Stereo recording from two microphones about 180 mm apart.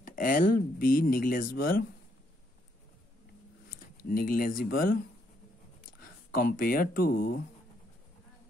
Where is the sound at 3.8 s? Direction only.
50° left (ahead or behind).